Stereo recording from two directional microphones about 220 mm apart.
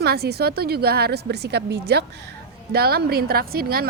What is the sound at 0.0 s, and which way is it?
A woman's voice, 45° right (ahead or behind).